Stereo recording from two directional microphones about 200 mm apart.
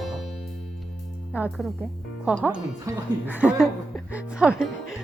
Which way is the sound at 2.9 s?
15° right (ahead or behind).